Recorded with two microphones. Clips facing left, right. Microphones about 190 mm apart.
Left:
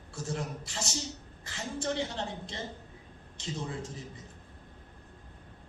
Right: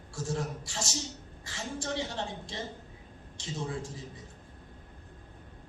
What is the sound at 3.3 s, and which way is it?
Speech, 20° left (ahead or behind).